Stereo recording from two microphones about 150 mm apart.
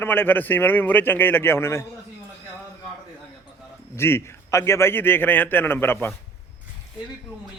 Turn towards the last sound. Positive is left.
turn(degrees=15)  # may be behind; listen again after turning